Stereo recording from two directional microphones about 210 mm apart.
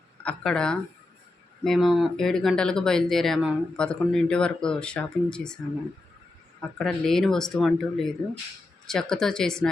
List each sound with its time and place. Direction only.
0.2 s speech: 5° left (ahead or behind)
6.6 s speech: centre (ahead or behind)